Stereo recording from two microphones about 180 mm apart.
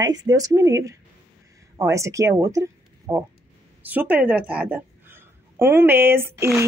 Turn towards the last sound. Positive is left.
turn(degrees=-15)  # may be behind; listen again after turning